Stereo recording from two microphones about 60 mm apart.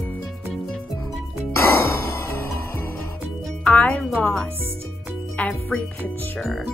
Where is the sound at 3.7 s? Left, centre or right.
Left.